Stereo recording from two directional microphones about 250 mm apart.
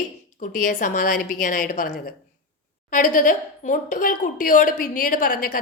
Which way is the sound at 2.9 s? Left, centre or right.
Left.